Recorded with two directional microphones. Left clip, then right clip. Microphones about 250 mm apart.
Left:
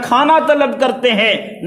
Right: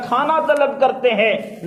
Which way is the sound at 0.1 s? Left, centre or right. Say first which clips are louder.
Left 5 dB; left.